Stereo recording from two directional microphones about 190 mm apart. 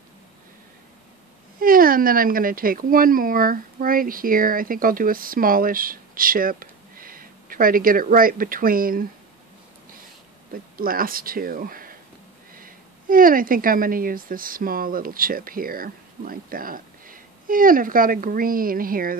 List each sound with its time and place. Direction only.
1.6 s speech: 50° right (ahead or behind)
10.5 s speech: 50° right (ahead or behind)